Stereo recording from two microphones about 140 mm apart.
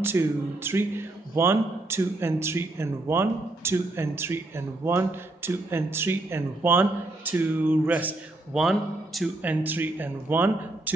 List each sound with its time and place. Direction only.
0.0 s a man's voice: 15° right (ahead or behind)
9.4 s a man's voice: 10° right (ahead or behind)